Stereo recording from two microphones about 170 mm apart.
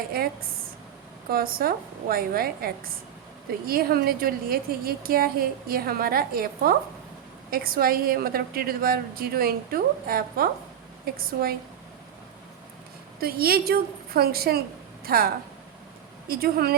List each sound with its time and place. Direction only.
0.1 s a woman's voice: 65° right (ahead or behind)
13.1 s a woman's voice: 65° right (ahead or behind)